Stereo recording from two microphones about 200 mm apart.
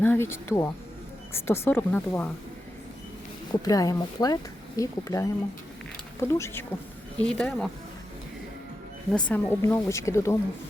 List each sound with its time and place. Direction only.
0.0 s speech: 10° left (ahead or behind)
3.5 s speech: 20° left (ahead or behind); by 7.7 s centre (ahead or behind)
9.1 s speech: 10° left (ahead or behind)